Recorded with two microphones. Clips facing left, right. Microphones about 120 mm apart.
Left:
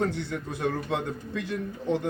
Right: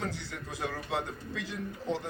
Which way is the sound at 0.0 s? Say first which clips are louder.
Left 9 dB; 55° left (ahead or behind).